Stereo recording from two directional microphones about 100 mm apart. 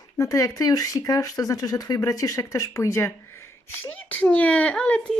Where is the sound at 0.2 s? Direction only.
35° left (ahead or behind).